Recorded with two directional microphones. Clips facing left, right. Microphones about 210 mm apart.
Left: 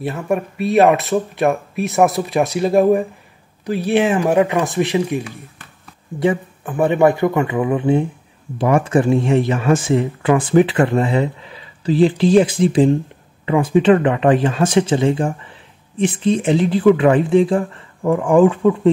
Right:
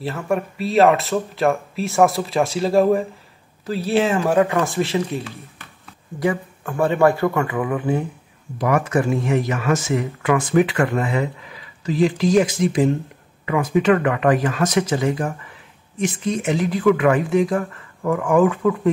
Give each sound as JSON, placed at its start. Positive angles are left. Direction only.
{"t": 0.0, "sound": "speech", "side_deg": 20}